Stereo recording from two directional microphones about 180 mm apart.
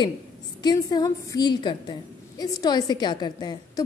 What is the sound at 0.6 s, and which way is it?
A woman's voice, 25° left (ahead or behind).